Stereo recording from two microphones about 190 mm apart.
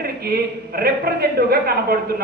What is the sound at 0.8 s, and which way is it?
A woman's voice, 55° right (ahead or behind).